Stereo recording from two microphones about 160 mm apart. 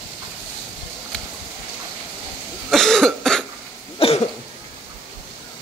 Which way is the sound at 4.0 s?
35° left (ahead or behind).